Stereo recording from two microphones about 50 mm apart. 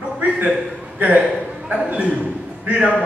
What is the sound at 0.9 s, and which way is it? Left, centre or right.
A man's voice, right.